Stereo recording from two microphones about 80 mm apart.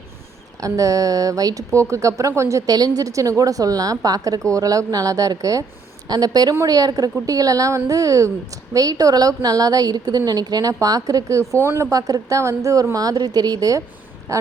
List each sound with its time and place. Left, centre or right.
0.6 s a woman's voice: right
11.6 s speech: right
11.9 s a woman's voice: right
14.3 s a sound: right